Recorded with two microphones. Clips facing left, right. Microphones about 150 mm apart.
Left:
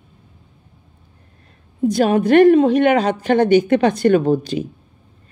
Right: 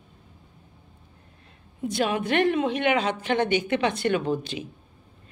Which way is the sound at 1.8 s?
40° left (ahead or behind).